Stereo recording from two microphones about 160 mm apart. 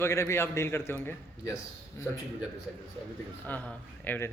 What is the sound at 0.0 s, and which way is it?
Speech, 15° left (ahead or behind).